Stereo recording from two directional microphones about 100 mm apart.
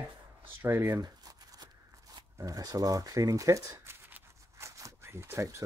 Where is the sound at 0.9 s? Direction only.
40° right (ahead or behind).